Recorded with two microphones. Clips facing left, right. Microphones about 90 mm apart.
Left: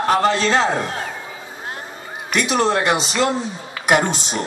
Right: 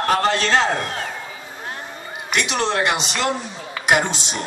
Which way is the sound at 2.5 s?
35° left (ahead or behind).